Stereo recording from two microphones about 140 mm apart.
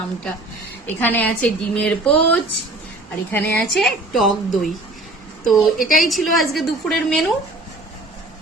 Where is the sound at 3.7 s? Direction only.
Centre (ahead or behind).